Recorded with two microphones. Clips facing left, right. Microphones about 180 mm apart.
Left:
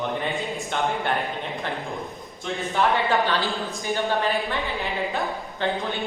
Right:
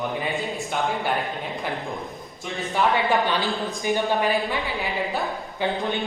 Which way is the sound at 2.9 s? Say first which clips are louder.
Right 1 dB; 15° right (ahead or behind).